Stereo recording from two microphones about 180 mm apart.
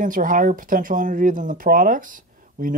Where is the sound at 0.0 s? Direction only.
50° right (ahead or behind).